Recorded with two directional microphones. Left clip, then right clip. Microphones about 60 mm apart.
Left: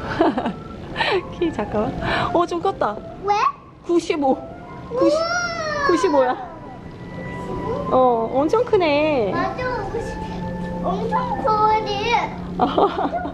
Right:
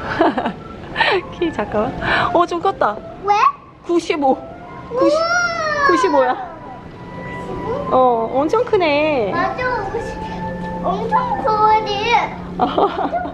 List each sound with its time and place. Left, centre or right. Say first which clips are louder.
0.0 s a sound: right 3 dB; centre
4.9 s speech: right 3 dB; centre
12.5 s laughter: right 2 dB; centre